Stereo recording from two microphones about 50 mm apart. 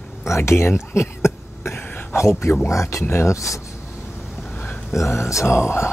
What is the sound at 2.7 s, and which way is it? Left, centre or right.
Speech, left.